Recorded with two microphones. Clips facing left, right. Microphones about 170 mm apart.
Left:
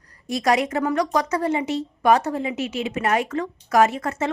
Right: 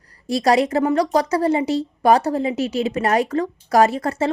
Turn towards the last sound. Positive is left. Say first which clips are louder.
# right 2 dB
turn(degrees=-35)  # may be behind; listen again after turning